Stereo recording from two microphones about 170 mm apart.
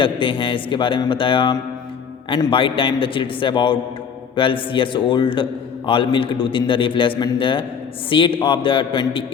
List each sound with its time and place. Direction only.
0.0 s a man's voice: 30° left (ahead or behind)